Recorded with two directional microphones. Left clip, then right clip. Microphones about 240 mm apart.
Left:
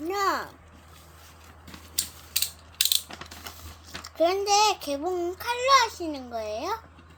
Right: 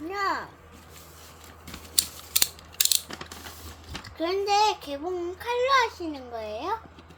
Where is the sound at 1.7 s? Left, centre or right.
Right.